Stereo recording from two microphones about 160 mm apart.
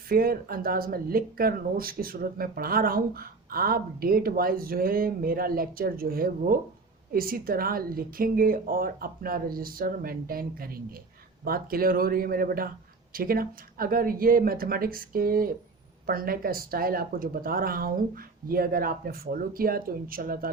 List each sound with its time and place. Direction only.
0.1 s speech: 65° right (ahead or behind)